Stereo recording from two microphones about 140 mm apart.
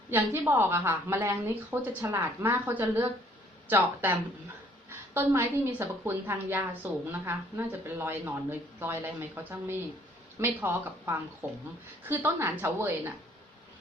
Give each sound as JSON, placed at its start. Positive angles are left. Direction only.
{"t": 0.1, "sound": "a woman's voice", "side_deg": -15}